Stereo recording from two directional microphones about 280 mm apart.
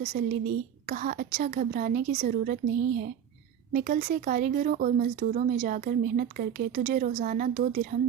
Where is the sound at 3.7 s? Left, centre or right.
Right.